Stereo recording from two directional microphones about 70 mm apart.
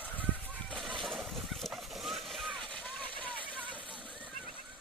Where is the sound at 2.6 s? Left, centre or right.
Centre.